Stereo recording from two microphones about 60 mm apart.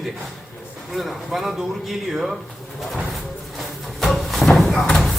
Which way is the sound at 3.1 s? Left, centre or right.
Centre.